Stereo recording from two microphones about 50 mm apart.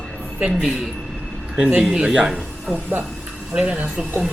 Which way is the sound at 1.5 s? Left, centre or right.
Right.